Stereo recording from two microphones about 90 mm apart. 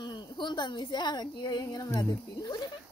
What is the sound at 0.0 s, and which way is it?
A woman's voice, 55° left (ahead or behind).